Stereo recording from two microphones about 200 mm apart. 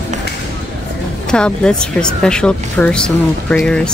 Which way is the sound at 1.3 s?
5° left (ahead or behind).